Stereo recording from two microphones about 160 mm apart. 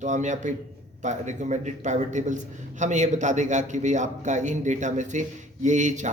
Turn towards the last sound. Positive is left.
turn(degrees=-50)  # may be behind; listen again after turning